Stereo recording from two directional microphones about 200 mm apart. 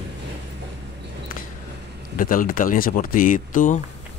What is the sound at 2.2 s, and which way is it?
A man's voice, 45° left (ahead or behind).